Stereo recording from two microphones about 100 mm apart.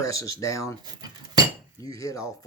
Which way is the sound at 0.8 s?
45° right (ahead or behind).